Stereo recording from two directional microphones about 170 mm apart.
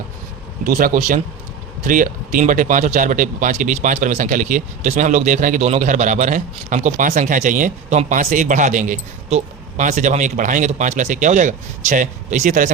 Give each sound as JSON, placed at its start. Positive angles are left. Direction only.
{"t": 0.6, "sound": "speech", "side_deg": -55}